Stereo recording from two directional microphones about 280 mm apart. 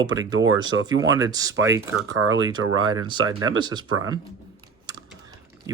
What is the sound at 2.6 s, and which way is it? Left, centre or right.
Speech, right.